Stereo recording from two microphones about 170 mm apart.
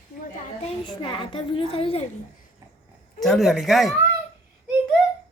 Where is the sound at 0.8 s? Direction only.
30° left (ahead or behind).